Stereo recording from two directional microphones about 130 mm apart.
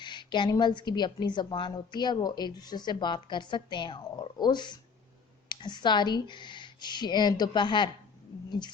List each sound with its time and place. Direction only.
0.0 s a woman's voice: 35° left (ahead or behind)